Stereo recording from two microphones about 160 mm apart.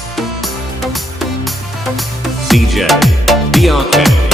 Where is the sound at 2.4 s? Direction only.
Centre (ahead or behind).